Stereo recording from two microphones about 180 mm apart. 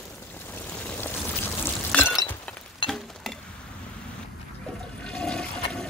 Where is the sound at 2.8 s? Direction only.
30° left (ahead or behind).